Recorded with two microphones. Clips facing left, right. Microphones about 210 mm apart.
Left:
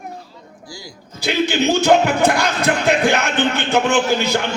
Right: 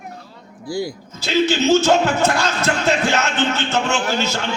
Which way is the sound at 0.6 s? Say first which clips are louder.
Right 14 dB; 60° right (ahead or behind).